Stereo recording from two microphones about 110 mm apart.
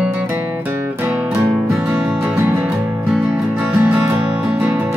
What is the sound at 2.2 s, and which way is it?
Music, 25° right (ahead or behind).